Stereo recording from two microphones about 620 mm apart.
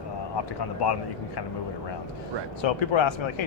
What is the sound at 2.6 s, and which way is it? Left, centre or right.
Speech, left.